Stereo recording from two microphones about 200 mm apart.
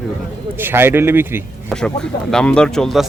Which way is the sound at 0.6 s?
10° right (ahead or behind).